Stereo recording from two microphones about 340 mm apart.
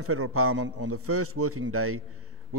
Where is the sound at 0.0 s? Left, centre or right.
Right.